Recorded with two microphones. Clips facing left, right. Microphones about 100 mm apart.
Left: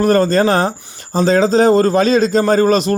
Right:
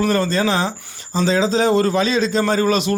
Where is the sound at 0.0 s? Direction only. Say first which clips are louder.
Left 6 dB; 45° left (ahead or behind).